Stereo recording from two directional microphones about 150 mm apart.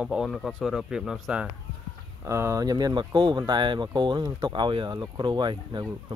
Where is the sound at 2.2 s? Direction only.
20° right (ahead or behind).